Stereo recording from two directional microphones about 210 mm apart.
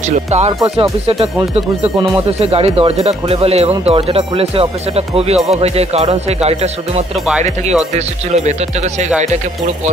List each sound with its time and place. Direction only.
0.5 s speech: 20° right (ahead or behind)
1.0 s speech: 30° right (ahead or behind)